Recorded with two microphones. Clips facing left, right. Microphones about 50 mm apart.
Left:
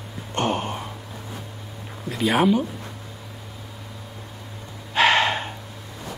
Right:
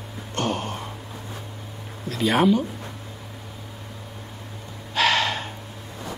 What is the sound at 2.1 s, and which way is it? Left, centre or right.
Speech, centre.